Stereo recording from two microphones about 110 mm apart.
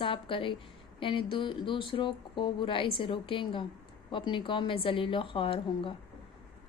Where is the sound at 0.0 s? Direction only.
55° left (ahead or behind).